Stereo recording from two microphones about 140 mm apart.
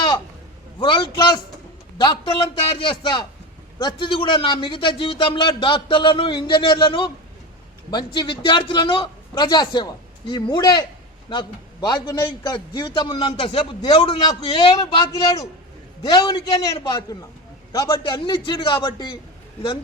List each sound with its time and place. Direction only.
0.8 s a man's voice: 35° left (ahead or behind)